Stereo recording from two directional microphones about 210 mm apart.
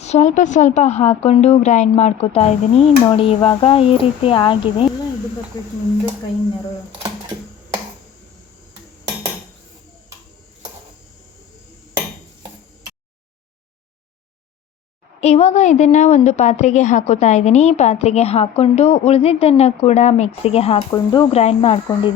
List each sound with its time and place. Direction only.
0.0 s a woman's voice: 35° left (ahead or behind); by 5.7 s 15° left (ahead or behind)
15.2 s a woman's voice: 30° left (ahead or behind)